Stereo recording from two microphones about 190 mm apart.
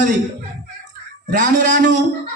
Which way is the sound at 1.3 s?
40° right (ahead or behind).